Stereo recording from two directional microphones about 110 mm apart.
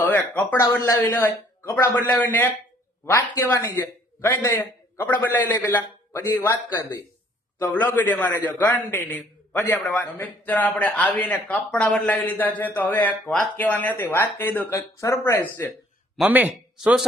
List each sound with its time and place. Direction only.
0.0 s speech: 15° left (ahead or behind)
1.2 s speech: 20° left (ahead or behind)
3.1 s a man's voice: 30° left (ahead or behind)
16.3 s speech: 10° right (ahead or behind)